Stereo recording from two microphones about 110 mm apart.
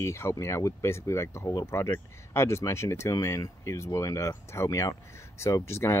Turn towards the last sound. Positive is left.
turn(degrees=25)  # may be behind; listen again after turning